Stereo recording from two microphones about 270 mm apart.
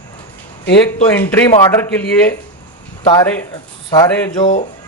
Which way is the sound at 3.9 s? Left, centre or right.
Centre.